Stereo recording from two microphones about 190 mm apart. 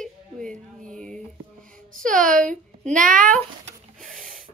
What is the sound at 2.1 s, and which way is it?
A child's voice, 45° right (ahead or behind).